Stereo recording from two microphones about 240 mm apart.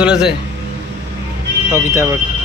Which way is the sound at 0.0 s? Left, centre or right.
Centre.